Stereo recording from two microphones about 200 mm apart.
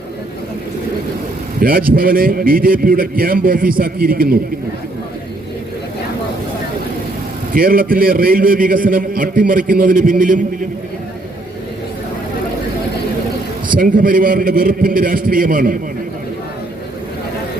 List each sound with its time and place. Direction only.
1.6 s a man's voice: 45° right (ahead or behind)
7.5 s a man's voice: 45° right (ahead or behind)
13.7 s a man's voice: 45° right (ahead or behind)